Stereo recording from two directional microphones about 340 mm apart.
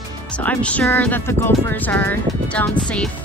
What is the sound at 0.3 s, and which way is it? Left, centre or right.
Speech, centre.